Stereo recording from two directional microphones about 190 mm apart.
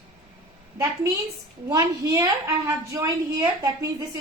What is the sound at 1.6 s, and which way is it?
Speech, 20° right (ahead or behind).